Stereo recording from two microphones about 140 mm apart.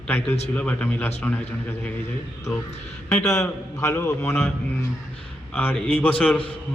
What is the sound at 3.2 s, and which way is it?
A man's voice, 20° left (ahead or behind).